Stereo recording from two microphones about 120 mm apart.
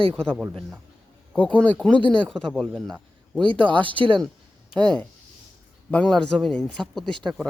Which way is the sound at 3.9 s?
45° right (ahead or behind).